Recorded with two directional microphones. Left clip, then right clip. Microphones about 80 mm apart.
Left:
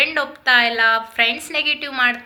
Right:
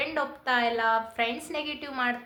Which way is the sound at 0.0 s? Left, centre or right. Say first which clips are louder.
Left 11 dB; right.